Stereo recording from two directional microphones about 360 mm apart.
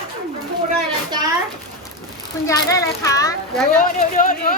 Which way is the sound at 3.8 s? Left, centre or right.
Left.